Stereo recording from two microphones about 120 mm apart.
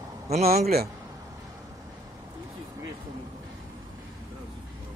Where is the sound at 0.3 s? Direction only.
65° right (ahead or behind).